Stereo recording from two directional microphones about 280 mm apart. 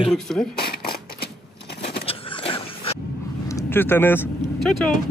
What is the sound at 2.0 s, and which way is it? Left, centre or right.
Vehicle, centre.